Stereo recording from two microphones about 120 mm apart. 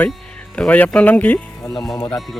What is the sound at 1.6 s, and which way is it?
Speech, 25° left (ahead or behind).